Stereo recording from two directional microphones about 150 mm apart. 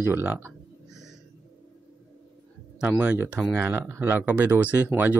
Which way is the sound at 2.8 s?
10° right (ahead or behind).